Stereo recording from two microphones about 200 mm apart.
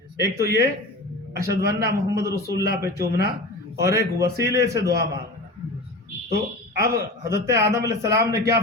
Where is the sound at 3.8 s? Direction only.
15° right (ahead or behind).